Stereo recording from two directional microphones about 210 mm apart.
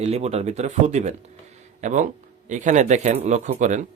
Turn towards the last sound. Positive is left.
turn(degrees=-35)  # may be behind; listen again after turning